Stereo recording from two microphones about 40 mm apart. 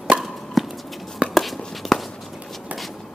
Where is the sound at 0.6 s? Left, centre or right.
Centre.